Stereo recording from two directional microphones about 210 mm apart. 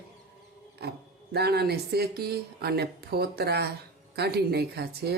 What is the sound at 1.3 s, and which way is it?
Speech, 50° right (ahead or behind).